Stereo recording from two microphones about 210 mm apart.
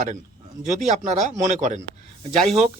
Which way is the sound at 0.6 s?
35° right (ahead or behind).